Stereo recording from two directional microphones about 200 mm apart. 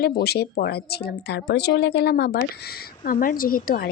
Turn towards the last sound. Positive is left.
turn(degrees=45)  # may be behind; listen again after turning